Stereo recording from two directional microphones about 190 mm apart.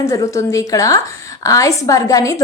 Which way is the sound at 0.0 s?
15° left (ahead or behind).